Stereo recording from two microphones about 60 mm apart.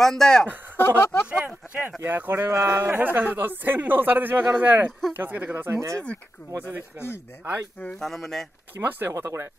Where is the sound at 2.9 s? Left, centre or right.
Right.